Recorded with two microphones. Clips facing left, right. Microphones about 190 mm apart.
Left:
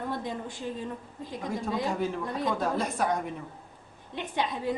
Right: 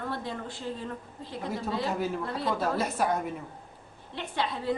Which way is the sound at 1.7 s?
15° left (ahead or behind).